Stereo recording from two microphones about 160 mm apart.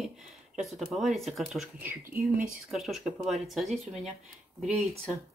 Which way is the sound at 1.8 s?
10° right (ahead or behind).